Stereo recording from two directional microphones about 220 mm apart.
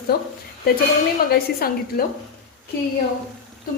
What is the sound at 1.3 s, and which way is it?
Speech, 45° left (ahead or behind).